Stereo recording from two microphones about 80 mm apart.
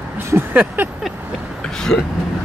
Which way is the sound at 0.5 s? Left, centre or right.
Right.